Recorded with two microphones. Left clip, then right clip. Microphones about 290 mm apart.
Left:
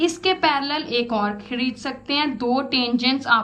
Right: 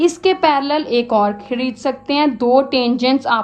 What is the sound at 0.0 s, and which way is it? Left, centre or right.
A woman's voice, right.